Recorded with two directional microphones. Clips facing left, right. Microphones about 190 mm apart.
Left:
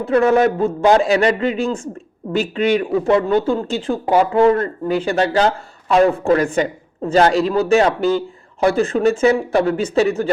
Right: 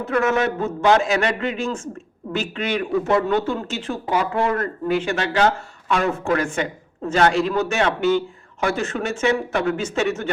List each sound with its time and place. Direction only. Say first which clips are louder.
0.0 s a man's voice: left 6 dB; 30° left (ahead or behind)